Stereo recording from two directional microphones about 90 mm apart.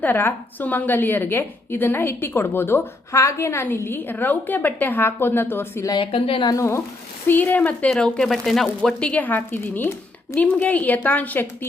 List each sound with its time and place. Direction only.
0.0 s a woman's voice: 25° left (ahead or behind)
6.0 s a woman's voice: 75° left (ahead or behind)
6.5 s a woman's voice: 35° left (ahead or behind)
7.3 s a woman's voice: 20° left (ahead or behind)
7.9 s speech: 10° left (ahead or behind)